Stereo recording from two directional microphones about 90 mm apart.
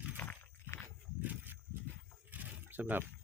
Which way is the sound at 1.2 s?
20° right (ahead or behind).